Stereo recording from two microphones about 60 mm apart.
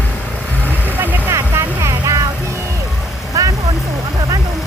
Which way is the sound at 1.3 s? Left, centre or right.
Right.